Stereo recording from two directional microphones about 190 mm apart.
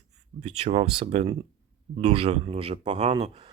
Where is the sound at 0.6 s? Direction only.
30° right (ahead or behind).